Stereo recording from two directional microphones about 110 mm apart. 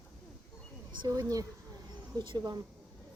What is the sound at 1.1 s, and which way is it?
Speech, 35° right (ahead or behind).